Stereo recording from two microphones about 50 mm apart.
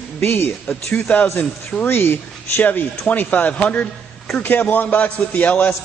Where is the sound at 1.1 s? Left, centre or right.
Left.